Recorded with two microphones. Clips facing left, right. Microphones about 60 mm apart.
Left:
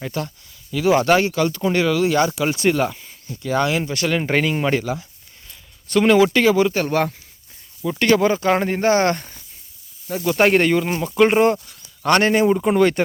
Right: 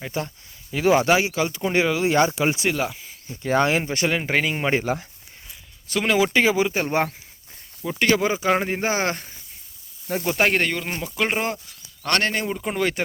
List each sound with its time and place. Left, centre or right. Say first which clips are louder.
0.0 s speech: left 2 dB; centre
0.7 s speech: left 1 dB; right
0.9 s speech: left 5 dB; centre
2.6 s speech: left 5 dB; centre
3.4 s speech: even; right
4.1 s speech: left 6 dB; centre
4.8 s speech: even; right
5.5 s speech: left 6 dB; centre